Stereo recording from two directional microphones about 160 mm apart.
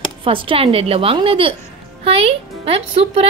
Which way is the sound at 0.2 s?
35° right (ahead or behind).